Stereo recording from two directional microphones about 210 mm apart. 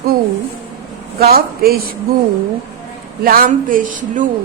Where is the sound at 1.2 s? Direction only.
45° right (ahead or behind).